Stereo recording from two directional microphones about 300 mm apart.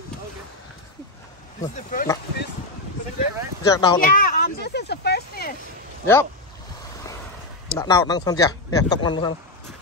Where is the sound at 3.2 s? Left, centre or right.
Centre.